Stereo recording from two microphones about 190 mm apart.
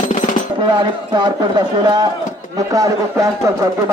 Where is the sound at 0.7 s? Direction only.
25° right (ahead or behind).